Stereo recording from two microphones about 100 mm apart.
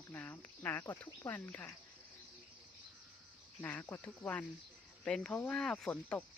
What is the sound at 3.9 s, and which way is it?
Speech, 25° left (ahead or behind).